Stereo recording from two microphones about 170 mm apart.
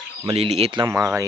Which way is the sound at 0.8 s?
15° right (ahead or behind).